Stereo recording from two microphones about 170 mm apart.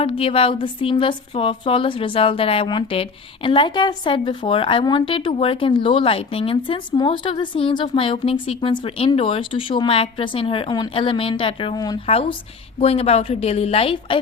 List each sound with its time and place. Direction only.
0.0 s speech: 35° left (ahead or behind)
12.8 s speech: 35° left (ahead or behind)